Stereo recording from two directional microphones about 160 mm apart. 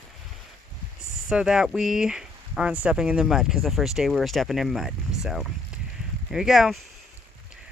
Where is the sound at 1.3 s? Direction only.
5° right (ahead or behind).